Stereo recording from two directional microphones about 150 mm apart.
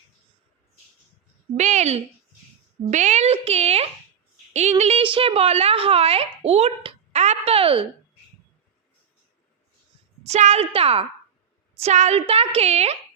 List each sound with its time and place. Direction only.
1.5 s a woman's voice: 50° right (ahead or behind)
10.2 s a woman's voice: 45° right (ahead or behind)
11.8 s a woman's voice: 50° right (ahead or behind)